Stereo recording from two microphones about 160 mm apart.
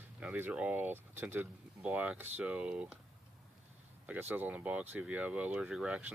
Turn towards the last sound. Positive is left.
turn(degrees=-5)  # may be behind; listen again after turning